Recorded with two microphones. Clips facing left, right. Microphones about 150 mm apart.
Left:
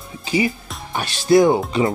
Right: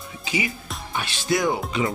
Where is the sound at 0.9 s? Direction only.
40° left (ahead or behind).